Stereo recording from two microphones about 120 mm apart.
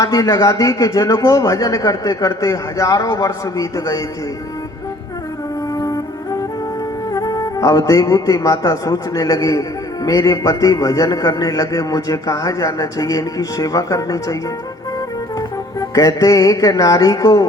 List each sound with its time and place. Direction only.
0.0 s a man's voice: 30° left (ahead or behind)
5.7 s music: 30° left (ahead or behind)
7.1 s speech: 30° left (ahead or behind)
15.4 s music: 30° left (ahead or behind)